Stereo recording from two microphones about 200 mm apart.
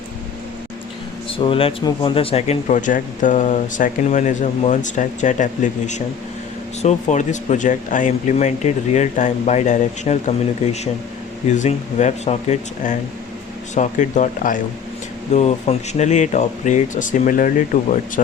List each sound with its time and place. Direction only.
1.3 s speech: 25° left (ahead or behind); by 17.5 s 40° left (ahead or behind)